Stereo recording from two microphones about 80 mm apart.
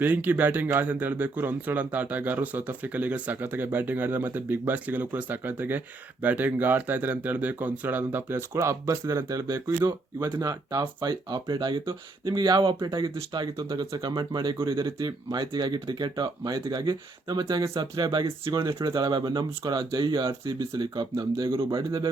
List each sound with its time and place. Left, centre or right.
0.0 s speech: right
9.3 s speech: right
18.5 s speech: right
18.9 s speech: right
21.7 s speech: right